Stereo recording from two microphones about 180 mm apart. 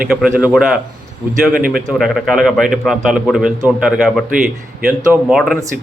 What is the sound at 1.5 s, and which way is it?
Speech, 55° right (ahead or behind).